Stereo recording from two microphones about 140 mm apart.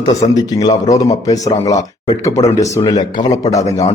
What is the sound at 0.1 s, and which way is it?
Speech, 25° left (ahead or behind).